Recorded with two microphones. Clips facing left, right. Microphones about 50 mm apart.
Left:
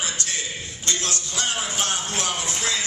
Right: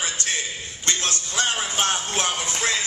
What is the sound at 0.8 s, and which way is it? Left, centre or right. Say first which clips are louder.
Music: right 2 dB; right.